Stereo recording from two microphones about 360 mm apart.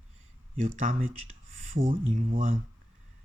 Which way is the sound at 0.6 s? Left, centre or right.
Right.